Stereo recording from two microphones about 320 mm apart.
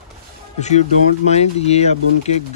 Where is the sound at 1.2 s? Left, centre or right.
Centre.